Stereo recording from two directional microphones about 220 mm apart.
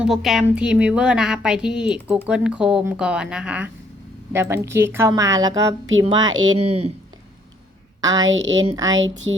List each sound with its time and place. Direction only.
0.0 s a sound: centre (ahead or behind)
4.3 s a woman's voice: 10° right (ahead or behind); by 6.9 s 30° right (ahead or behind)
8.0 s a woman's voice: 15° right (ahead or behind)
8.3 s a woman's voice: 60° right (ahead or behind)
8.6 s a woman's voice: 15° right (ahead or behind)